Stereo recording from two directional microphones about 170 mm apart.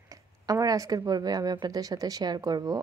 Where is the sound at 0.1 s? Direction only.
20° right (ahead or behind).